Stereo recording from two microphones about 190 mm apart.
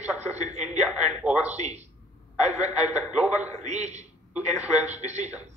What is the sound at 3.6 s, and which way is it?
A man's voice, 35° right (ahead or behind).